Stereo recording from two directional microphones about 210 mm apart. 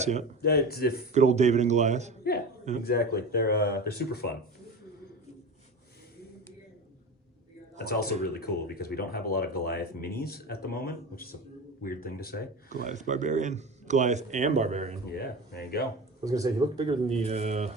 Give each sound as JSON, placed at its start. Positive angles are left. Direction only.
{"t": 0.0, "sound": "speech", "side_deg": -35}
{"t": 0.4, "sound": "speech", "side_deg": 45}
{"t": 1.1, "sound": "speech", "side_deg": -35}
{"t": 2.8, "sound": "speech", "side_deg": 50}
{"t": 7.8, "sound": "speech", "side_deg": 50}
{"t": 12.8, "sound": "speech", "side_deg": -35}
{"t": 15.1, "sound": "speech", "side_deg": 50}
{"t": 16.2, "sound": "speech", "side_deg": -15}